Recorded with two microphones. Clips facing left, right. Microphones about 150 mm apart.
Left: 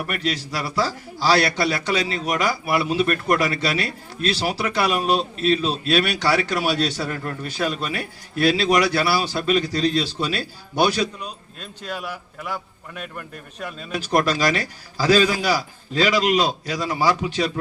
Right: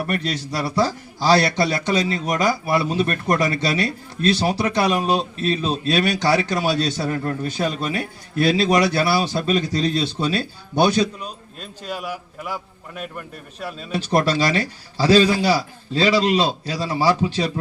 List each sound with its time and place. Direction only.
0.1 s a man's voice: 25° right (ahead or behind)
11.8 s a man's voice: 10° right (ahead or behind)
13.9 s a man's voice: 30° right (ahead or behind)